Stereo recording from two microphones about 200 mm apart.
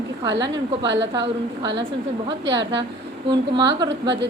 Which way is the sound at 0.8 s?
60° right (ahead or behind).